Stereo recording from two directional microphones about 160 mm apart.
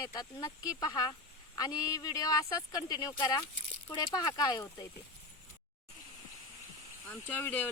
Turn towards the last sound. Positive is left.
turn(degrees=10)  # may be behind; listen again after turning